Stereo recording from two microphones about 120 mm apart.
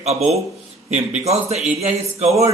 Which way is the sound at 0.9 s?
65° right (ahead or behind).